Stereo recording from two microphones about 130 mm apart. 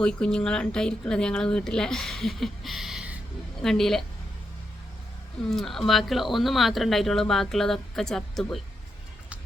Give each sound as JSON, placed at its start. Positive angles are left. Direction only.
{"t": 0.0, "sound": "speech", "side_deg": 5}
{"t": 5.5, "sound": "speech", "side_deg": 0}